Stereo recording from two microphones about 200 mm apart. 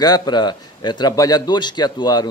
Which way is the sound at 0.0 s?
20° left (ahead or behind).